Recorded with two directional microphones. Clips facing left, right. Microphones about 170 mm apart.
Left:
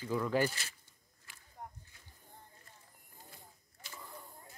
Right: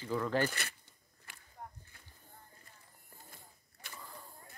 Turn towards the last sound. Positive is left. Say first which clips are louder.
# even
turn(degrees=-60)  # may be behind; listen again after turning